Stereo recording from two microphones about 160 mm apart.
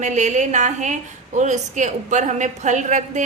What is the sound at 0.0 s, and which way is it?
A woman's voice, 50° right (ahead or behind).